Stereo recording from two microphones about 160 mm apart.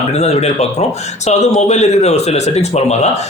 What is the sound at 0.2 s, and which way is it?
Speech, 40° left (ahead or behind).